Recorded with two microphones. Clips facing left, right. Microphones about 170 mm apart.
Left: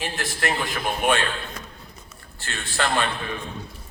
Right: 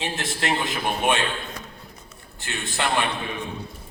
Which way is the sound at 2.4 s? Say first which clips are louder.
Left 1 dB; 20° right (ahead or behind).